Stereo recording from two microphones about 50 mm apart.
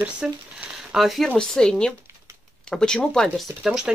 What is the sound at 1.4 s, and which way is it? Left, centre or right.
Speech, centre.